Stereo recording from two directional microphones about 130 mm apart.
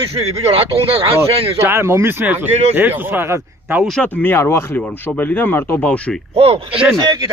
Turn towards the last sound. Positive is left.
turn(degrees=-30)  # may be behind; listen again after turning